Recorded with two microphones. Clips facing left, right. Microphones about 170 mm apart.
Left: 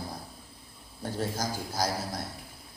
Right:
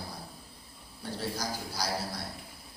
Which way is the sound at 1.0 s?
45° left (ahead or behind).